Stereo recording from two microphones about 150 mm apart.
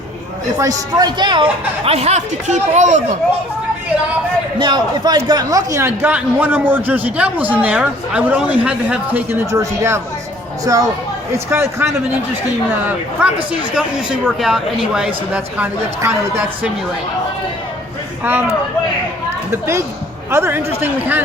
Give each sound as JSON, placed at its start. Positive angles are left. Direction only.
{"t": 0.6, "sound": "speech", "side_deg": -25}
{"t": 4.6, "sound": "a man's voice", "side_deg": -30}
{"t": 13.1, "sound": "a man's voice", "side_deg": -5}
{"t": 18.2, "sound": "speech", "side_deg": -10}
{"t": 19.5, "sound": "a man's voice", "side_deg": -20}